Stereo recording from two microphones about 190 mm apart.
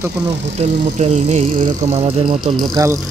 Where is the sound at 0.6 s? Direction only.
35° right (ahead or behind).